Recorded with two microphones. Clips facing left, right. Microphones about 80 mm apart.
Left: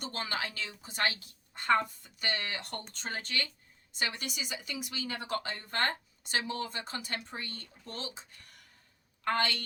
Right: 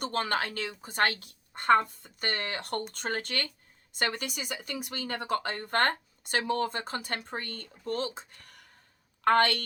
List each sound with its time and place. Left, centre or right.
0.0 s speech: right
9.2 s speech: right